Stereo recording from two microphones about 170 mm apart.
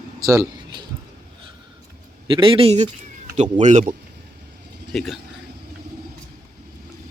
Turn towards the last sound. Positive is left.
turn(degrees=0)  # may be behind; listen again after turning